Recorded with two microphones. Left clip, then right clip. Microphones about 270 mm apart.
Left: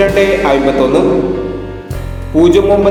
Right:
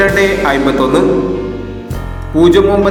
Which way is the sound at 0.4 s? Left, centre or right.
Right.